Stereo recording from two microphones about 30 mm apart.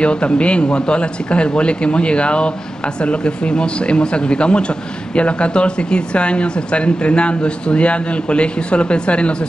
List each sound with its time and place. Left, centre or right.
0.0 s speech: left